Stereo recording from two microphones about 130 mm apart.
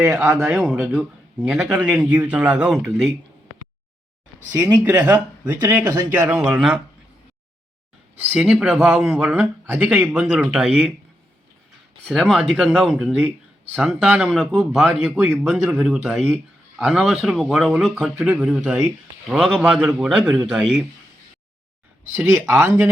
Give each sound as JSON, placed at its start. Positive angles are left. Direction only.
{"t": 0.0, "sound": "speech", "side_deg": -20}
{"t": 0.9, "sound": "speech", "side_deg": -5}
{"t": 4.5, "sound": "speech", "side_deg": -25}
{"t": 4.8, "sound": "speech", "side_deg": -15}
{"t": 8.3, "sound": "speech", "side_deg": -5}
{"t": 9.2, "sound": "speech", "side_deg": -15}
{"t": 12.0, "sound": "speech", "side_deg": 0}
{"t": 22.1, "sound": "speech", "side_deg": -20}